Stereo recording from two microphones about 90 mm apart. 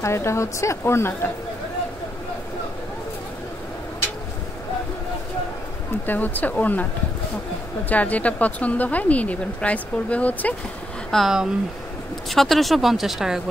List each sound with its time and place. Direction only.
0.0 s a woman's voice: 30° left (ahead or behind)
6.0 s speech: 20° left (ahead or behind)
7.9 s speech: 15° left (ahead or behind)
11.1 s speech: centre (ahead or behind)